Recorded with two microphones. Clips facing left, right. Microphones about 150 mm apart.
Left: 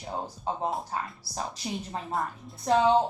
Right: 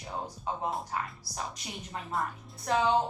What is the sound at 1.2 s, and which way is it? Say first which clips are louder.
Speech: left 4 dB; 30° left (ahead or behind).